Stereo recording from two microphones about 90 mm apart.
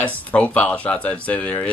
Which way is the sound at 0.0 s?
15° left (ahead or behind).